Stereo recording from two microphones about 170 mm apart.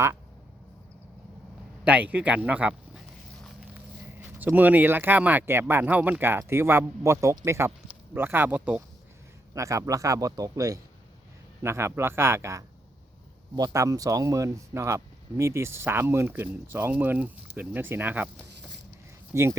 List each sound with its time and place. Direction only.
1.8 s speech: 10° right (ahead or behind)
4.2 s speech: 10° right (ahead or behind)
19.3 s speech: 15° right (ahead or behind)